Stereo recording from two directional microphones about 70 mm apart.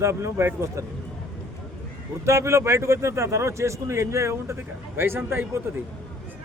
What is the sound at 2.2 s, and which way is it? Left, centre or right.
A man's voice, right.